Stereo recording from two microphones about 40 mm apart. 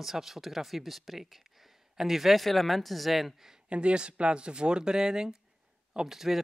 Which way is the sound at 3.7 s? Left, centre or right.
Right.